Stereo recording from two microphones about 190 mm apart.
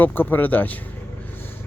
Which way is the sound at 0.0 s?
10° left (ahead or behind).